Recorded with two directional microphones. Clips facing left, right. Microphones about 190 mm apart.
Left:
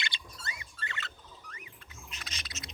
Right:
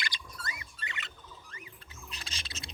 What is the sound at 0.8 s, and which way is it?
Rodents, 15° right (ahead or behind).